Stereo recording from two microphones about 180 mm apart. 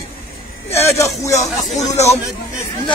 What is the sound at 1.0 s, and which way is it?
Speech, 15° left (ahead or behind).